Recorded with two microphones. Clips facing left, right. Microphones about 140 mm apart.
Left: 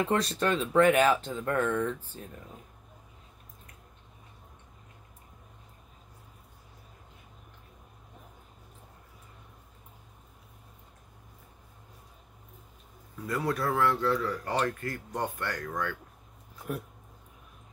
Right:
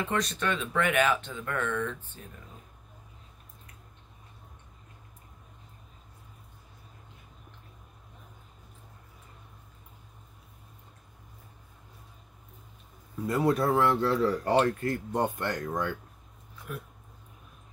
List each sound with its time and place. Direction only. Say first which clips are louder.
0.0 s speech: left 3 dB; 35° left (ahead or behind)
13.3 s speech: right 4 dB; 25° right (ahead or behind)